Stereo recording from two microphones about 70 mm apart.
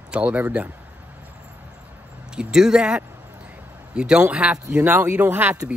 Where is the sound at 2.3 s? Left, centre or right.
Centre.